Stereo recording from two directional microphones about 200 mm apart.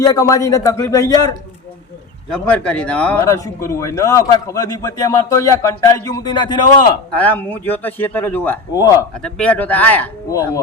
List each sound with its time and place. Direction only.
0.0 s speech: 20° left (ahead or behind)
2.3 s speech: 5° left (ahead or behind); by 7.0 s 20° left (ahead or behind)
7.1 s speech: 10° left (ahead or behind)
9.1 s speech: 5° left (ahead or behind)